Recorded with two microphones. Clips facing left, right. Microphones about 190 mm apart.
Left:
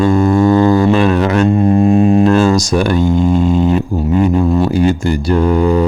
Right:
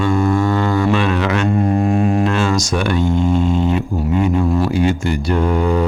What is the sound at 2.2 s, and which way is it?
Speech, 35° left (ahead or behind).